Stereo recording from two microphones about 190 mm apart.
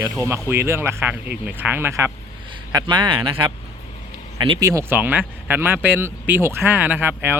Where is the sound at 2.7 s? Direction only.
25° right (ahead or behind).